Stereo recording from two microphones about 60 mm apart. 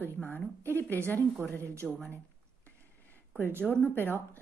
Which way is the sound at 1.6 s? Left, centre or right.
Right.